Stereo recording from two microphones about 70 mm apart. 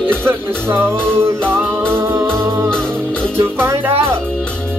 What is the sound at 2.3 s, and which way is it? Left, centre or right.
Music, right.